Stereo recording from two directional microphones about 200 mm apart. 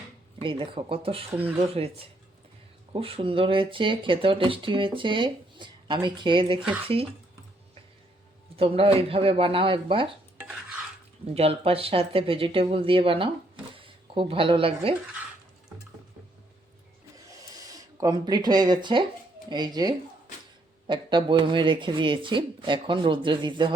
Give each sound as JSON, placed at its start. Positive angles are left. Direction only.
{"t": 0.3, "sound": "speech", "side_deg": -25}
{"t": 8.5, "sound": "speech", "side_deg": -30}
{"t": 10.3, "sound": "stir", "side_deg": -5}
{"t": 11.3, "sound": "speech", "side_deg": -30}
{"t": 17.5, "sound": "speech", "side_deg": -15}